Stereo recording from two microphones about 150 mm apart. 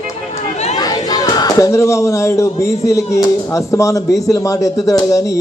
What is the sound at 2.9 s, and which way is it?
Speech, 20° left (ahead or behind).